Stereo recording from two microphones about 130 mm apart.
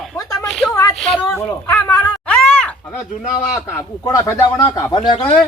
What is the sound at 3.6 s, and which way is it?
Speech, 25° left (ahead or behind).